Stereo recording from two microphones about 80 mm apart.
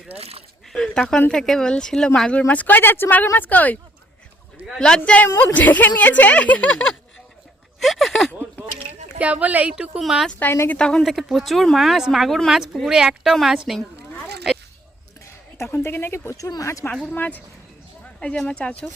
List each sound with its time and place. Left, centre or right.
0.7 s speech: centre
2.5 s speech: left
4.8 s speech: centre
7.8 s speech: centre
9.1 s speech: centre
10.4 s speech: left
10.8 s speech: centre
11.0 s speech: centre
15.5 s speech: left
16.4 s speech: left
16.9 s speech: centre
18.4 s speech: centre